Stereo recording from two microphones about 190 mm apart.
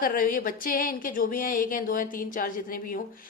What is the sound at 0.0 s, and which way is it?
Speech, 45° left (ahead or behind).